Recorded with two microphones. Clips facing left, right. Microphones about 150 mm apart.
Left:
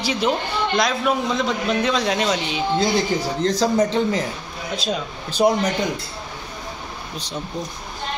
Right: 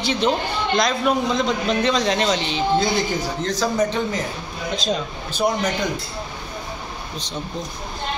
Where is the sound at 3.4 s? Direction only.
30° left (ahead or behind).